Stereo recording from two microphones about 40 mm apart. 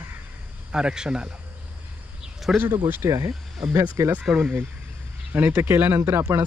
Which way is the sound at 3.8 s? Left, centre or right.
Right.